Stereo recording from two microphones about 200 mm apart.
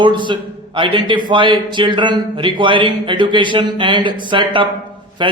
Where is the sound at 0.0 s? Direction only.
25° right (ahead or behind).